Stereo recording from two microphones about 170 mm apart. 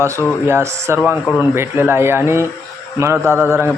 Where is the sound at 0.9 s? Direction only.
10° left (ahead or behind).